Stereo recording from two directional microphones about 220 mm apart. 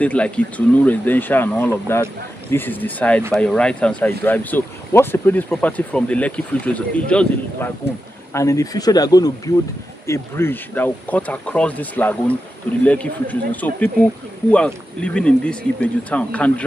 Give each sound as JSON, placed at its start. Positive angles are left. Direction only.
{"t": 0.0, "sound": "speech", "side_deg": 5}